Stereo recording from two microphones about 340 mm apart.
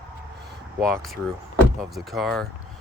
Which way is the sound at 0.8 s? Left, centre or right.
Centre.